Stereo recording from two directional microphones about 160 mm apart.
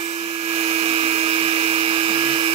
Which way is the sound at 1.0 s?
40° right (ahead or behind).